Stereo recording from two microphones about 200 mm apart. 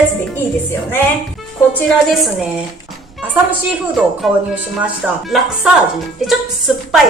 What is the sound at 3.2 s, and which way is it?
A woman's voice, 10° right (ahead or behind).